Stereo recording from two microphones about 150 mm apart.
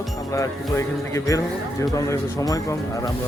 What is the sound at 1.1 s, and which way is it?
Speech, 20° left (ahead or behind).